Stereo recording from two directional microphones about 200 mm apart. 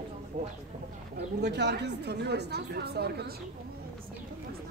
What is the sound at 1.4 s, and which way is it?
Speech, 55° right (ahead or behind).